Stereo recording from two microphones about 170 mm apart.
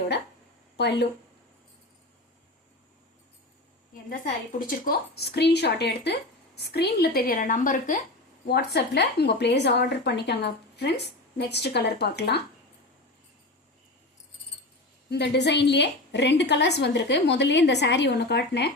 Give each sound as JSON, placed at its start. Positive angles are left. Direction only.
{"t": 0.8, "sound": "a woman's voice", "side_deg": 75}
{"t": 4.1, "sound": "a woman's voice", "side_deg": 55}
{"t": 8.4, "sound": "a woman's voice", "side_deg": 70}
{"t": 15.1, "sound": "a woman's voice", "side_deg": 80}